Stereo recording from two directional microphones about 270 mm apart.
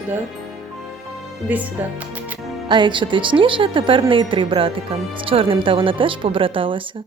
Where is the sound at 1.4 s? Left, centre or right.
Centre.